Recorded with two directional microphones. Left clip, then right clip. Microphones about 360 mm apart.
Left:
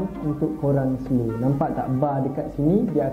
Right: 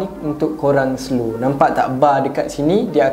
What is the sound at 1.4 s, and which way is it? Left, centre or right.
Speech, centre.